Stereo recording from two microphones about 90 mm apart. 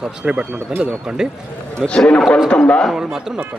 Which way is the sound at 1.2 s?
5° right (ahead or behind).